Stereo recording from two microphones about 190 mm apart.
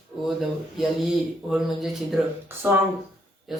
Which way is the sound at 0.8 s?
Centre (ahead or behind).